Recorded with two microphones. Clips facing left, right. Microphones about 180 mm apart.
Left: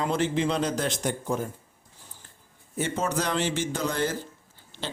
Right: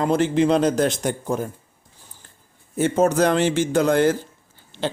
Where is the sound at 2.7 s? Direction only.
45° right (ahead or behind).